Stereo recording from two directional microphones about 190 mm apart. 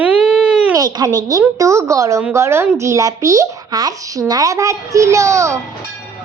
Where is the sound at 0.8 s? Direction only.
20° right (ahead or behind).